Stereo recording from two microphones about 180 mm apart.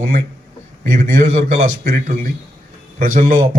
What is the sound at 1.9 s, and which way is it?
A man's voice, 50° right (ahead or behind).